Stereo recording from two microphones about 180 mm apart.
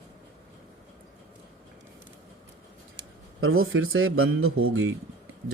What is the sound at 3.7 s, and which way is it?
Speech, 90° right.